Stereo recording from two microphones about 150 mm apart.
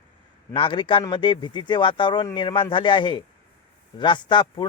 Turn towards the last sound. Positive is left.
turn(degrees=30)  # may be behind; listen again after turning